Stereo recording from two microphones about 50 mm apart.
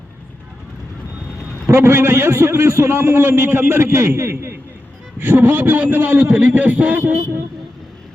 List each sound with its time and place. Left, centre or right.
1.6 s a man's voice: right
5.2 s a man's voice: right